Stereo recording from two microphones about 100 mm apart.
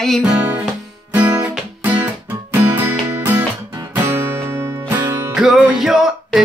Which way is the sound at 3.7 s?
30° right (ahead or behind).